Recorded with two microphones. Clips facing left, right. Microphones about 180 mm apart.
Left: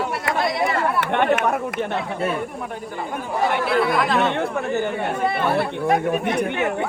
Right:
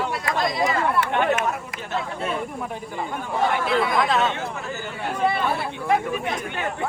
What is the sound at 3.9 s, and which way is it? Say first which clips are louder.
Speech: left 2 dB; 60° left (ahead or behind).